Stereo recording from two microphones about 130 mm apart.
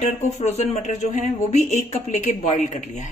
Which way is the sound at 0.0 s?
60° left (ahead or behind).